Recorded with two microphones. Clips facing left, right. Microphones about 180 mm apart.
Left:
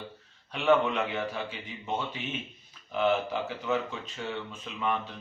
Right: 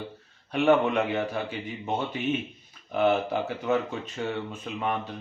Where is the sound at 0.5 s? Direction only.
45° right (ahead or behind).